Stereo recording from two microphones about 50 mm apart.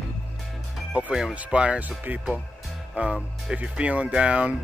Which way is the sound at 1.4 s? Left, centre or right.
Right.